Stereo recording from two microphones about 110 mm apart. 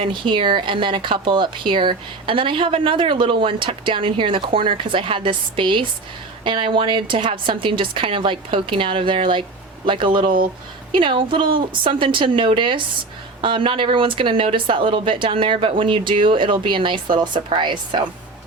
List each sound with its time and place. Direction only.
0.0 s speech: 50° right (ahead or behind)